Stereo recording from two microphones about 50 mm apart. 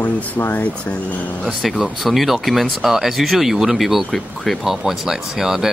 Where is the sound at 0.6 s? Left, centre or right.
Left.